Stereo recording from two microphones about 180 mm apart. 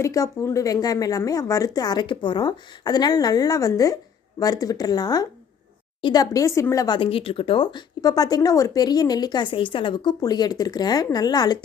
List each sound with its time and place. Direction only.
0.0 s speech: 20° left (ahead or behind)